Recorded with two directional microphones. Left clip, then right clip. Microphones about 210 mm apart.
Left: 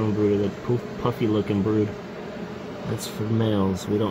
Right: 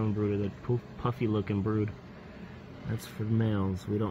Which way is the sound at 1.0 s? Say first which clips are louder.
Left 8 dB; 5° right (ahead or behind).